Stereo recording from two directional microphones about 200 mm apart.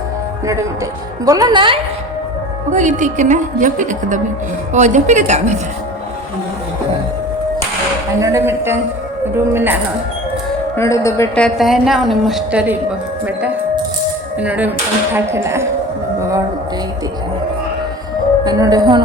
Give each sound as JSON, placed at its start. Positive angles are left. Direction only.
{"t": 1.2, "sound": "speech", "side_deg": -20}
{"t": 2.7, "sound": "a woman's voice", "side_deg": -40}
{"t": 8.2, "sound": "a sound", "side_deg": -15}
{"t": 9.5, "sound": "speech", "side_deg": -10}
{"t": 10.8, "sound": "a woman's voice", "side_deg": 15}
{"t": 14.3, "sound": "speech", "side_deg": -5}
{"t": 18.4, "sound": "speech", "side_deg": -20}